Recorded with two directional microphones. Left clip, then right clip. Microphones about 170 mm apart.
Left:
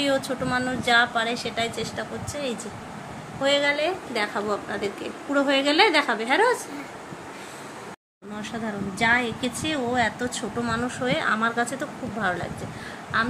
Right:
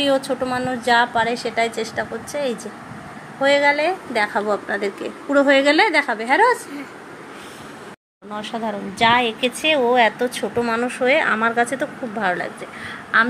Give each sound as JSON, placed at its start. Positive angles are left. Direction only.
{"t": 0.0, "sound": "a woman's voice", "side_deg": -20}
{"t": 8.4, "sound": "a woman's voice", "side_deg": -25}